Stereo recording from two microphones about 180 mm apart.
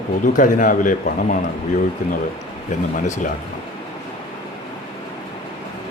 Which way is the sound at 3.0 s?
45° left (ahead or behind).